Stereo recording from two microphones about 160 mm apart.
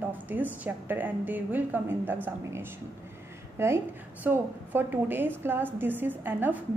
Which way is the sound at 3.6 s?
15° right (ahead or behind).